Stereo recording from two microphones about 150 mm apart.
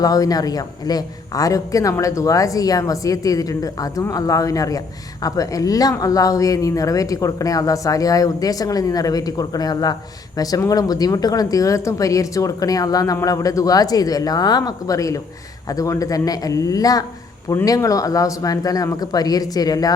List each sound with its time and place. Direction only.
0.0 s speech: 25° left (ahead or behind)